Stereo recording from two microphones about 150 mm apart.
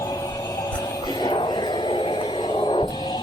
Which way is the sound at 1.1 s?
30° left (ahead or behind).